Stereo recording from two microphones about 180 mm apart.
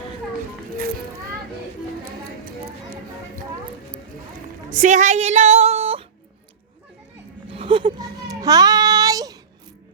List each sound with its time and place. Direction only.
4.7 s music: 45° right (ahead or behind)
7.5 s child singing: 30° right (ahead or behind)